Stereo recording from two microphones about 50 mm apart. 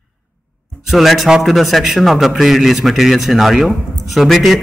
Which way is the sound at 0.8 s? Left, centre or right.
Centre.